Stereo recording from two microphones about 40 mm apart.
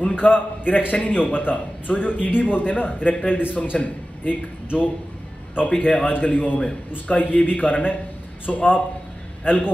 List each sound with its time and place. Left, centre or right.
0.0 s a man's voice: left
6.1 s a man's voice: left